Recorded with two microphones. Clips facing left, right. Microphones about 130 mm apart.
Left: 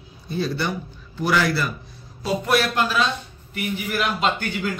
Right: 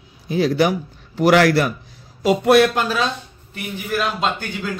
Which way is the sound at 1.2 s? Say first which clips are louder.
Right 7 dB; 75° right (ahead or behind).